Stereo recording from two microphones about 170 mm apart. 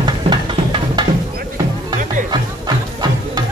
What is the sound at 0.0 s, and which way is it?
Music, 25° right (ahead or behind).